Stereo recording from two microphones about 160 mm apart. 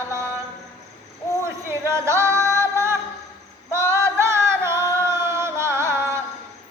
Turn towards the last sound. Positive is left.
turn(degrees=-15)  # may be behind; listen again after turning